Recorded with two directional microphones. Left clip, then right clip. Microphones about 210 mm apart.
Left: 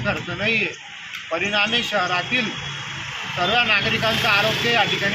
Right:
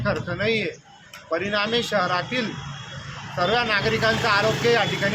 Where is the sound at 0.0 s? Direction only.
20° right (ahead or behind).